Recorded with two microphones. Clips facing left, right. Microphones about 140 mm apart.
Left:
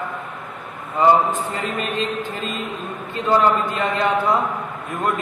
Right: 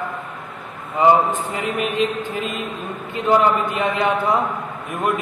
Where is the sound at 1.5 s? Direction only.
20° right (ahead or behind).